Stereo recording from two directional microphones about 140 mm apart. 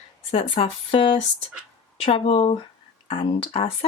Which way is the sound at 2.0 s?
45° left (ahead or behind).